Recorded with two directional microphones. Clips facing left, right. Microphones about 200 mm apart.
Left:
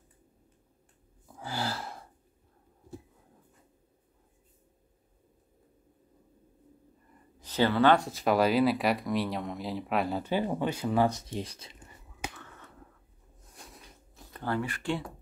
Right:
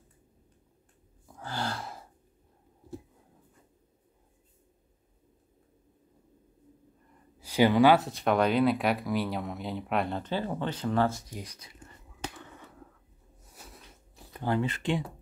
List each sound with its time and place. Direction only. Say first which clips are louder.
1.2 s gasp: even; 10° left (ahead or behind)
7.3 s speech: right 3 dB; 10° right (ahead or behind); by 11.7 s 25° left (ahead or behind)
12.4 s finger snapping: right 3 dB; 10° right (ahead or behind)
13.4 s a sound: even; 5° right (ahead or behind)
14.1 s speech: right 3 dB; 15° right (ahead or behind)